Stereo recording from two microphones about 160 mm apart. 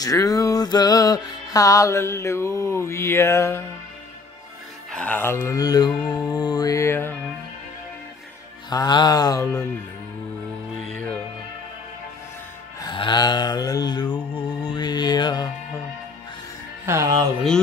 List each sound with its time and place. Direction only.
0.0 s music: 20° left (ahead or behind)
4.9 s music: 10° left (ahead or behind)
8.6 s music: 25° left (ahead or behind)
12.8 s music: 30° left (ahead or behind)
16.8 s speech: 20° right (ahead or behind)